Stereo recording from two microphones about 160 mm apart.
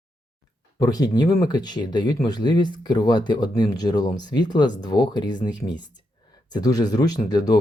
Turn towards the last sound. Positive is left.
turn(degrees=25)  # may be behind; listen again after turning